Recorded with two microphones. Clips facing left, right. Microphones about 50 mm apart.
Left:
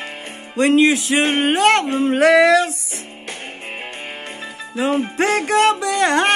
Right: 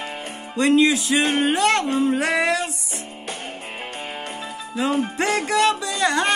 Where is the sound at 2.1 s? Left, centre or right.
Left.